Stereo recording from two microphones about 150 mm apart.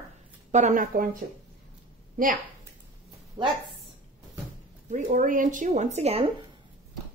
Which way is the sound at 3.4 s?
25° right (ahead or behind).